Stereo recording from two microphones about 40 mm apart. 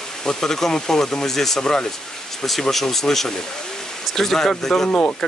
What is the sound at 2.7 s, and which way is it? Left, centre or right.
Speech, centre.